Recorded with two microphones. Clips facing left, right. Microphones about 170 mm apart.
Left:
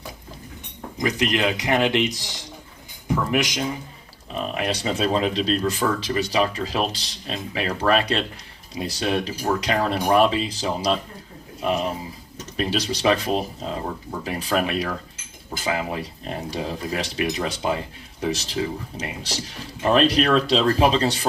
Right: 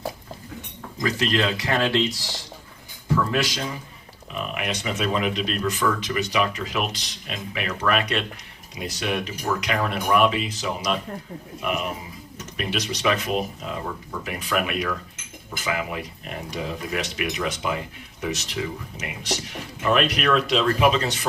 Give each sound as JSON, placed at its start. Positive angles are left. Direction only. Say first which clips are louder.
{"t": 0.9, "sound": "speech", "louder": "left 1 dB", "side_deg": 20}
{"t": 4.5, "sound": "speech", "louder": "left 4 dB", "side_deg": 35}
{"t": 12.5, "sound": "speech", "louder": "left 4 dB", "side_deg": 30}